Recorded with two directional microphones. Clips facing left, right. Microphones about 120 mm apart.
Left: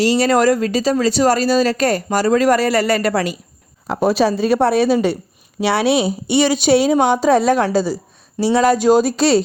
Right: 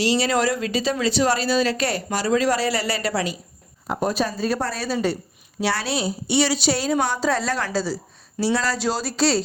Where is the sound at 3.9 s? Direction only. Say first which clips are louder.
Left 8 dB; 80° left.